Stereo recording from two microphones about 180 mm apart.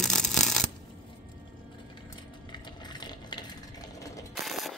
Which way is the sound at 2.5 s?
25° left (ahead or behind).